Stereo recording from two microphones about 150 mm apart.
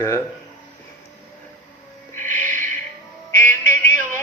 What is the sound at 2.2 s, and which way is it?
Music, 55° right (ahead or behind).